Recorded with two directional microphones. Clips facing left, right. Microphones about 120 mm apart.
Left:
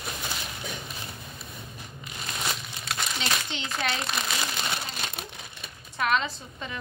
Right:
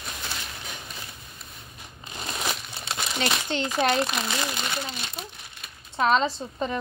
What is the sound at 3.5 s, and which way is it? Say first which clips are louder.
Speech: right 9 dB; 45° right (ahead or behind).